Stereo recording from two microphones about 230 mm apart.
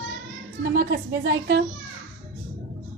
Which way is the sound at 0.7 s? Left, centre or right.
Right.